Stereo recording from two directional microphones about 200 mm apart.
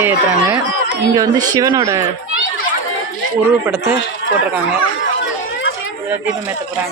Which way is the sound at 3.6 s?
10° right (ahead or behind).